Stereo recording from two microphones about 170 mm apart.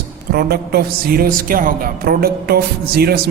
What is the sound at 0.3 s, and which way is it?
A woman's voice, 65° right (ahead or behind).